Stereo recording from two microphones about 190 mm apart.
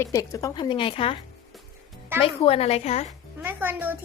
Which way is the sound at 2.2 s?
30° left (ahead or behind).